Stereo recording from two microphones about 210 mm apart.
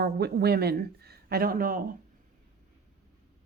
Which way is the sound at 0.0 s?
50° right (ahead or behind).